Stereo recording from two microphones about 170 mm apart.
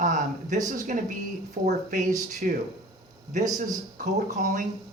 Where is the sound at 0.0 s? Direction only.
50° right (ahead or behind).